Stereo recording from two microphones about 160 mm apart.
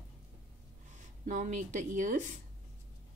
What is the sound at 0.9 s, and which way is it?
Speech, 50° right (ahead or behind).